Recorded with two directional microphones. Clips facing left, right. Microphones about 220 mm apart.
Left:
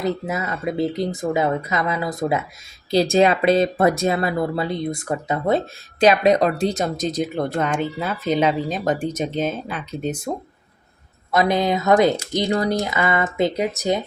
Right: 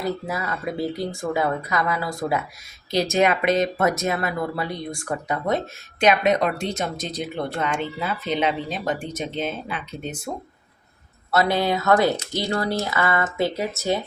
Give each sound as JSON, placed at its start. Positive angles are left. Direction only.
{"t": 0.0, "sound": "speech", "side_deg": 20}
{"t": 2.9, "sound": "speech", "side_deg": 30}
{"t": 11.3, "sound": "speech", "side_deg": 15}